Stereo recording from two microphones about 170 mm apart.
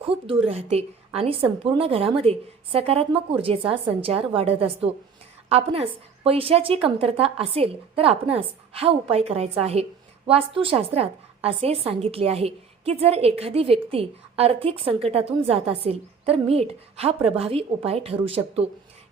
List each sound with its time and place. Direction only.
0.0 s a woman's voice: 30° right (ahead or behind)